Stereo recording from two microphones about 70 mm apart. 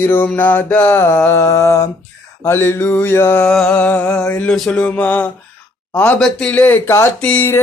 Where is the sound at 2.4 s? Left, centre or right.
Left.